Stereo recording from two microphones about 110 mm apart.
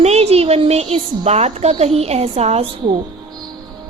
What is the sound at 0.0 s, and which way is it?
A woman's voice, 70° right (ahead or behind).